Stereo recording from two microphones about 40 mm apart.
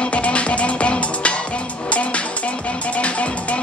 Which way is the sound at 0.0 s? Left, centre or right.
Left.